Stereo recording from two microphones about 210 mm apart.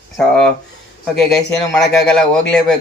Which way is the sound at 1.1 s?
Centre (ahead or behind).